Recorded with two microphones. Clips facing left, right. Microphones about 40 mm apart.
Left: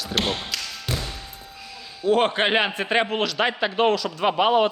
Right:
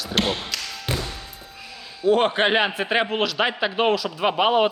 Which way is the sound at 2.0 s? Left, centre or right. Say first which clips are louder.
Right 1 dB; centre.